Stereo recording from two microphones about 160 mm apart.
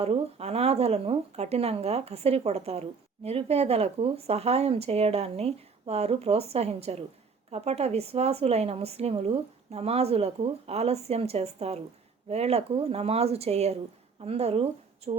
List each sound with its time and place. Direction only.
0.0 s speech: 40° right (ahead or behind)